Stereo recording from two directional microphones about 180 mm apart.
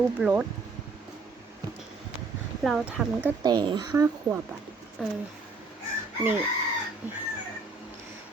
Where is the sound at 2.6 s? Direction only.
5° right (ahead or behind).